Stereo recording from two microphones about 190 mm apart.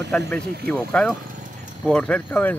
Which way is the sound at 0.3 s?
5° left (ahead or behind).